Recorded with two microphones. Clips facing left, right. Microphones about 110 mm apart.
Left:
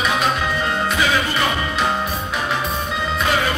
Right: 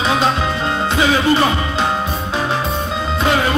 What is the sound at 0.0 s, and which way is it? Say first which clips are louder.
Music: right 3 dB; 25° right (ahead or behind).